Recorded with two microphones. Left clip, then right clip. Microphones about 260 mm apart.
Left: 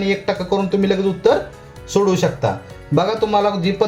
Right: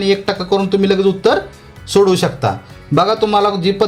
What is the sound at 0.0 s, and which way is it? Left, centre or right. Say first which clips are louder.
A man's voice: right 4 dB; right.